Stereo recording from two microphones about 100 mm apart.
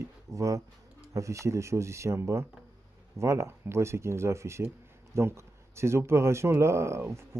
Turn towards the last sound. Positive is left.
turn(degrees=-30)  # may be behind; listen again after turning